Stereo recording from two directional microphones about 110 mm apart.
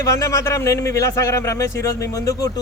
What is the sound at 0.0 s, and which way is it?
Speech, 30° left (ahead or behind).